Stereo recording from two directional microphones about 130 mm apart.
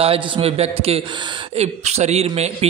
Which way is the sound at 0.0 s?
50° right (ahead or behind).